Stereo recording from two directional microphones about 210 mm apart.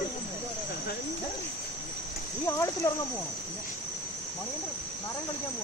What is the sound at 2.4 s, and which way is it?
Speech, 15° left (ahead or behind).